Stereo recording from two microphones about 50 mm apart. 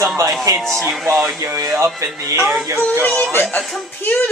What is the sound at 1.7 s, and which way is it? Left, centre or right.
Speech, right.